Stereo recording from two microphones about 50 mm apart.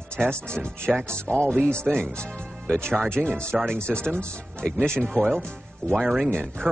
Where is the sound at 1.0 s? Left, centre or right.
Right.